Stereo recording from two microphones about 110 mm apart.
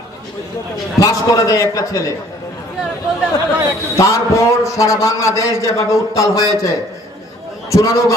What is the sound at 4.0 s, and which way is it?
A man's voice, 30° left (ahead or behind).